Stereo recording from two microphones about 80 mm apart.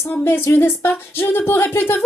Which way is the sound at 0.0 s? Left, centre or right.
Left.